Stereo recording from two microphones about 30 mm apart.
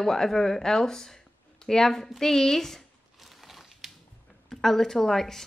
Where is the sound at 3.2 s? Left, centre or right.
Centre.